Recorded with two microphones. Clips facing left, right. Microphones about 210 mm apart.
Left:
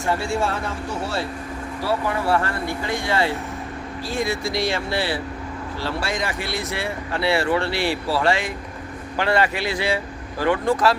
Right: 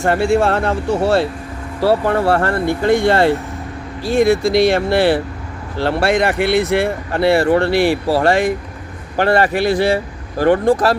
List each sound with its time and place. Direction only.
0.0 s speech: 65° right (ahead or behind); by 10.0 s 50° right (ahead or behind)
10.7 s speech: 35° right (ahead or behind)